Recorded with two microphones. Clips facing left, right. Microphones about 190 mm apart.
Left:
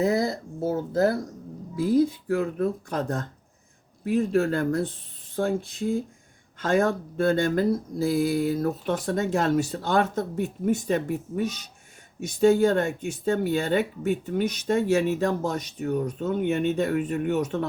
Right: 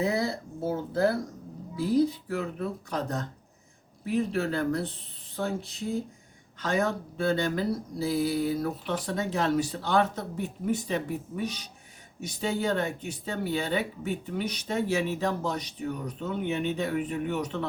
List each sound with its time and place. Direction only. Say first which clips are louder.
0.0 s speech: left 4 dB; 45° left (ahead or behind)